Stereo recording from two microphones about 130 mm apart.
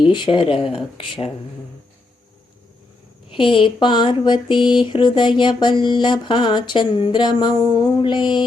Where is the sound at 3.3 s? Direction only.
40° left (ahead or behind).